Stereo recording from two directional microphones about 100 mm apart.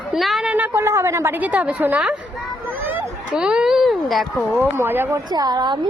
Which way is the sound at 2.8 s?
20° right (ahead or behind).